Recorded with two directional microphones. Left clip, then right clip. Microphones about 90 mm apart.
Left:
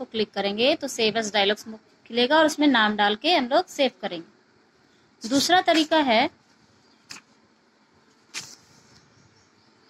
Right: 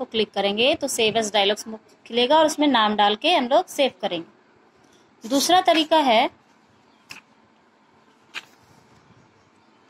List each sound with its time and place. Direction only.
0.0 s a woman's voice: 35° right (ahead or behind)
8.3 s vehicle: 40° right (ahead or behind)